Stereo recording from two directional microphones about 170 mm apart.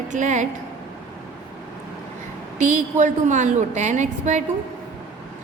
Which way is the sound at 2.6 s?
45° right (ahead or behind).